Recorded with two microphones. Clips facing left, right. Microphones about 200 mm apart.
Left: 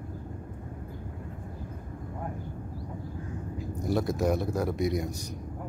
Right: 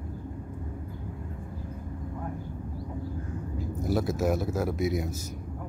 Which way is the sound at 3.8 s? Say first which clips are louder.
Even; centre (ahead or behind).